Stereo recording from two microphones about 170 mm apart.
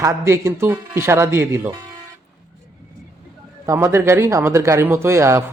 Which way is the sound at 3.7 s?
15° right (ahead or behind).